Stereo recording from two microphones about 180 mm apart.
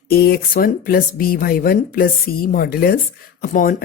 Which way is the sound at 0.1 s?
60° left (ahead or behind).